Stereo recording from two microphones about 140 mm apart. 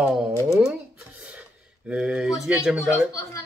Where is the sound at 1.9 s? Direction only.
5° right (ahead or behind).